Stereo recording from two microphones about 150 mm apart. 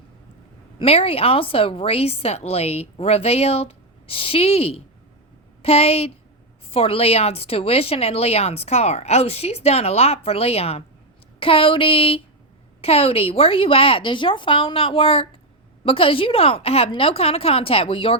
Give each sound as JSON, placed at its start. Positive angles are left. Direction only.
{"t": 0.8, "sound": "a woman's voice", "side_deg": 40}